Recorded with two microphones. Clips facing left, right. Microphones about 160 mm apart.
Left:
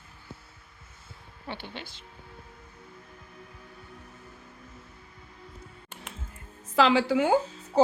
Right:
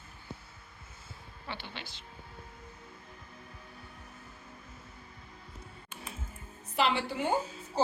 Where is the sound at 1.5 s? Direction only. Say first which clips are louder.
Left 4 dB; 50° left (ahead or behind).